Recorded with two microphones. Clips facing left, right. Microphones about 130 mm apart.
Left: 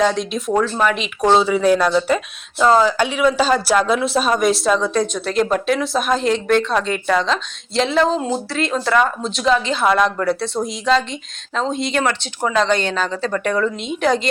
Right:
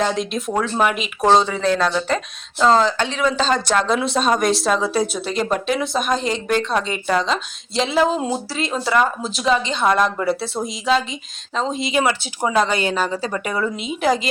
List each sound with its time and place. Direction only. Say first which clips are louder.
0.0 s a woman's voice: left 3 dB; centre (ahead or behind)